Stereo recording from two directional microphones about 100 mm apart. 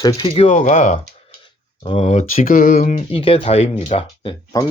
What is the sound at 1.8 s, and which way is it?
Speech, 60° left (ahead or behind).